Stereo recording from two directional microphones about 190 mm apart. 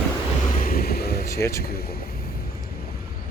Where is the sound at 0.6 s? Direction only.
50° left (ahead or behind).